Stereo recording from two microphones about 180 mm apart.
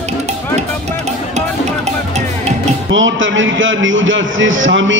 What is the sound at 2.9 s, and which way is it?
A man's voice, 90° right.